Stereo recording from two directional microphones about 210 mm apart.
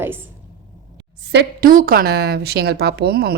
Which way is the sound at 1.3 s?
50° right (ahead or behind).